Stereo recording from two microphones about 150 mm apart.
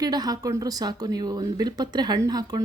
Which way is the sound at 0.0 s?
25° right (ahead or behind).